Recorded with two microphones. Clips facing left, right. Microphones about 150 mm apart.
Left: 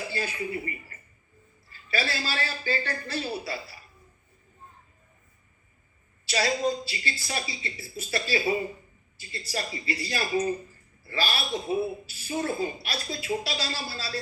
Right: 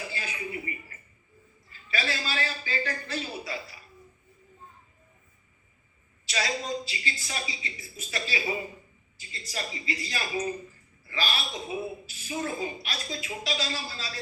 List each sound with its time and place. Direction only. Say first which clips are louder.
0.1 s a woman's voice: left 5 dB; 35° left (ahead or behind)
6.2 s a woman's voice: left 6 dB; 35° left (ahead or behind)